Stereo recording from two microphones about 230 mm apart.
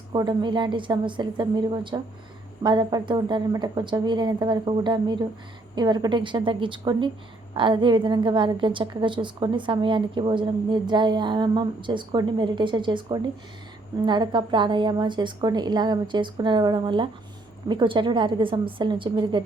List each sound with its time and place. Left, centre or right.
0.1 s a woman's voice: centre